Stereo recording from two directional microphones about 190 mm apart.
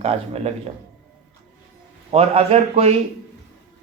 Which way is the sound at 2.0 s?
30° right (ahead or behind).